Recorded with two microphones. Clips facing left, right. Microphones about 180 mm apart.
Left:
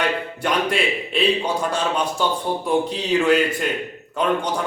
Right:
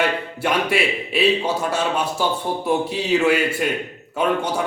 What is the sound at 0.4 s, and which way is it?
A man's voice, 5° right (ahead or behind).